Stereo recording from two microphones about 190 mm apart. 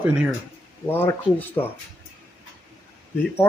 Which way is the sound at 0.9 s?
10° left (ahead or behind).